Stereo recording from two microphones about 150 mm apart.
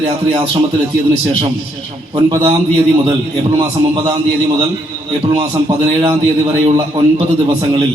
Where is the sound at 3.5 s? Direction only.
45° right (ahead or behind).